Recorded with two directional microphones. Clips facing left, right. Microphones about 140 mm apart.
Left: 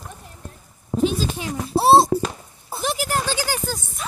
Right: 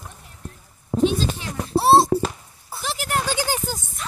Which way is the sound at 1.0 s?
5° left (ahead or behind).